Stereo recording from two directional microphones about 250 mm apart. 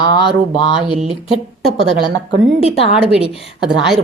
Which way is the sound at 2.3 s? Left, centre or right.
Right.